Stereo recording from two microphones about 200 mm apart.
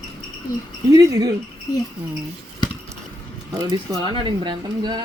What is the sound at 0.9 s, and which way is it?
Speech, 20° right (ahead or behind).